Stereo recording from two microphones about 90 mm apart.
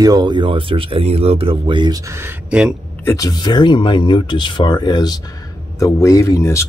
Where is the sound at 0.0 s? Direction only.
50° right (ahead or behind); by 1.9 s 80° right.